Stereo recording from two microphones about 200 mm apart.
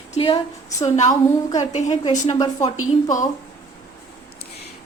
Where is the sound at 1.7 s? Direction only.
35° left (ahead or behind).